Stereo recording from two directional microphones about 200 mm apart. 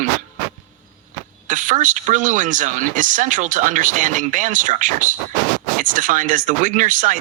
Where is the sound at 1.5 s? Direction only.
40° right (ahead or behind).